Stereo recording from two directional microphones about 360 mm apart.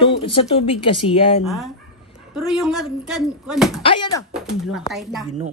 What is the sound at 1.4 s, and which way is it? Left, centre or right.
A woman's voice, centre.